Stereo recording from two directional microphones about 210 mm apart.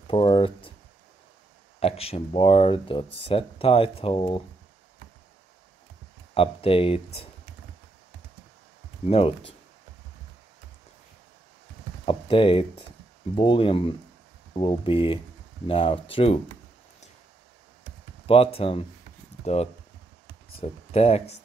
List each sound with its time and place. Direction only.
0.1 s speech: 25° left (ahead or behind)
1.8 s speech: 30° left (ahead or behind)
6.3 s speech: 25° left (ahead or behind)
9.0 s speech: 25° left (ahead or behind)
12.1 s speech: 25° left (ahead or behind)
18.2 s speech: 25° left (ahead or behind)